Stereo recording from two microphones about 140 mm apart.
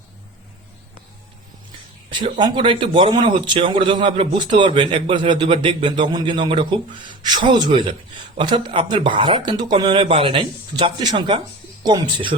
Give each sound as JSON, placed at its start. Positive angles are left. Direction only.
{"t": 2.0, "sound": "a man's voice", "side_deg": -35}